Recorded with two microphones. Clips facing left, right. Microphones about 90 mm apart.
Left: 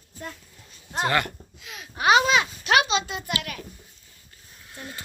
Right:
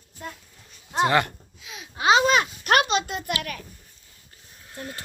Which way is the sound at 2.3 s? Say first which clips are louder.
Right 1 dB; 50° right (ahead or behind).